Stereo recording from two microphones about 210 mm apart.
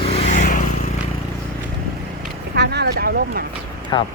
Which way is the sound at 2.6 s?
50° right (ahead or behind).